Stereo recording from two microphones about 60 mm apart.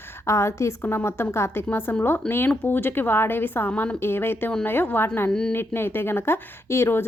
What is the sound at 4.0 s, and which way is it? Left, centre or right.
A woman's voice, left.